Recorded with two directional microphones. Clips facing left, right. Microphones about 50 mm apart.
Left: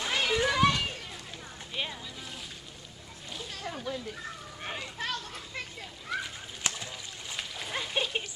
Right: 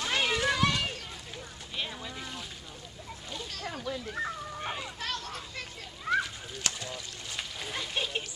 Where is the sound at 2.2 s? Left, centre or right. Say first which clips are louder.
Right 2 dB; centre.